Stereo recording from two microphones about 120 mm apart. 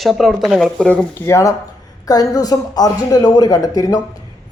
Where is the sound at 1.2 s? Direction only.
25° left (ahead or behind).